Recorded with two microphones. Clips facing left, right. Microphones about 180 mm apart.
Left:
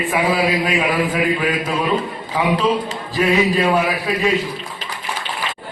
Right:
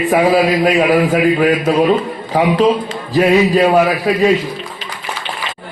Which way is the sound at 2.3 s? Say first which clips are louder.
Right 5 dB; 40° right (ahead or behind).